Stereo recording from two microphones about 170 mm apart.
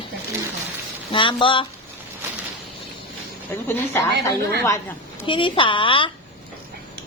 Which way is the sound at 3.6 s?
10° left (ahead or behind).